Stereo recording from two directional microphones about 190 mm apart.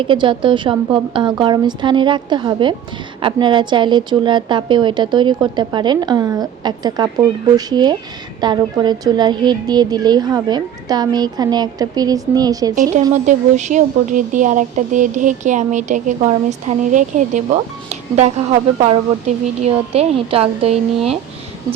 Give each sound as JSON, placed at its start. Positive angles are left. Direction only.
{"t": 0.0, "sound": "a woman's voice", "side_deg": -25}
{"t": 12.7, "sound": "a woman's voice", "side_deg": -40}